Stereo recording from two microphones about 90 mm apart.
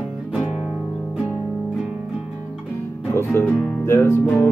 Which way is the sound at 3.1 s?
30° left (ahead or behind).